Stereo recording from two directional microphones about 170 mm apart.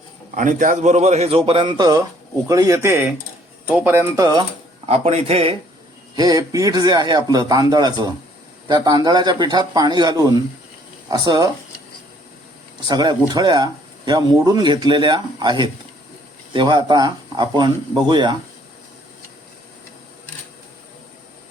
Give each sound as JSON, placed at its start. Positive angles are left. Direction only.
{"t": 0.3, "sound": "a man's voice", "side_deg": -50}
{"t": 4.9, "sound": "a man's voice", "side_deg": -35}
{"t": 6.1, "sound": "speech", "side_deg": -20}
{"t": 12.9, "sound": "speech", "side_deg": -25}